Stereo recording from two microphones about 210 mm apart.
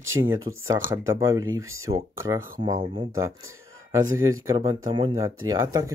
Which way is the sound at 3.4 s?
70° right (ahead or behind).